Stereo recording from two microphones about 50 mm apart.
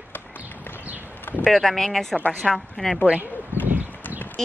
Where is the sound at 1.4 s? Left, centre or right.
Centre.